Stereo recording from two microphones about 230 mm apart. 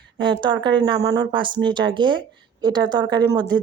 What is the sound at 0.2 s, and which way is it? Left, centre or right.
A woman's voice, centre.